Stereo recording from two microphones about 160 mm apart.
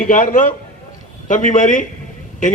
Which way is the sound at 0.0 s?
55° left (ahead or behind).